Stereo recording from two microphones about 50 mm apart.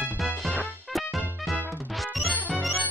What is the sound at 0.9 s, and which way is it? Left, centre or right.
Music, centre.